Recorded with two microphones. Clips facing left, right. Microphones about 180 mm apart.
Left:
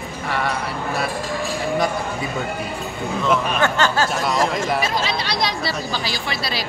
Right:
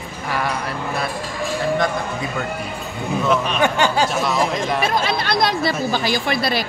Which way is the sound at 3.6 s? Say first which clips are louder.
Right 1 dB; 15° right (ahead or behind).